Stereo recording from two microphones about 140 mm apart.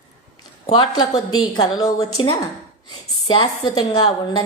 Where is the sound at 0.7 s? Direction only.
35° left (ahead or behind).